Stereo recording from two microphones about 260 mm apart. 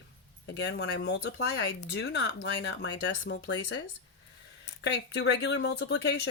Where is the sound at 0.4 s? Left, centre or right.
Left.